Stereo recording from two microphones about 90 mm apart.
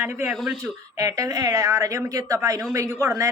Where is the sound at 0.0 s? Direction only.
25° right (ahead or behind).